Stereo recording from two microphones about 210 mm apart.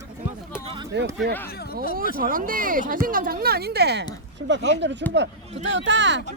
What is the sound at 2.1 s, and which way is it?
Speech, 40° right (ahead or behind).